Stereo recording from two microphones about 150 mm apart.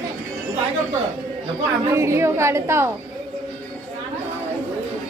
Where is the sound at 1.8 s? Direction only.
20° right (ahead or behind).